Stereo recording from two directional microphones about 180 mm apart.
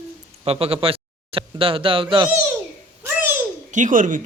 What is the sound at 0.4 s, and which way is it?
Speech, 35° right (ahead or behind).